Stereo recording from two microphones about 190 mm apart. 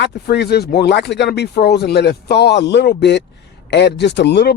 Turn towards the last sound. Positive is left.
turn(degrees=60)  # may be behind; listen again after turning